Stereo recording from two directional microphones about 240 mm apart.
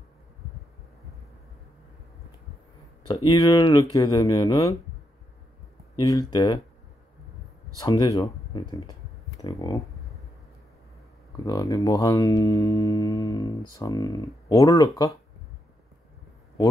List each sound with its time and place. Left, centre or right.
3.3 s speech: centre
5.9 s speech: centre
7.8 s speech: centre
11.4 s speech: centre